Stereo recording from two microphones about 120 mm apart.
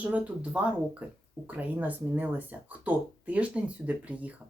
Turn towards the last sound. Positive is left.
turn(degrees=-10)  # may be behind; listen again after turning